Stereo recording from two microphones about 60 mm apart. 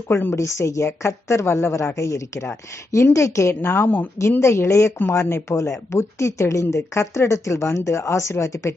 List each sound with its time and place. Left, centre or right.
0.1 s a woman's voice: left
0.4 s speech: left
3.6 s a woman's voice: left
4.4 s speech: left